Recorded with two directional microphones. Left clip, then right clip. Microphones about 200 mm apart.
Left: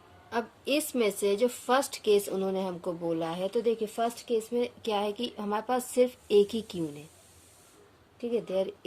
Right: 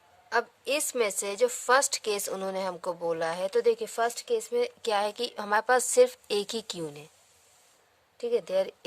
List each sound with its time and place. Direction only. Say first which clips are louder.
0.3 s a woman's voice: right 2 dB; 45° right (ahead or behind)
8.2 s a woman's voice: right 3 dB; 55° right (ahead or behind)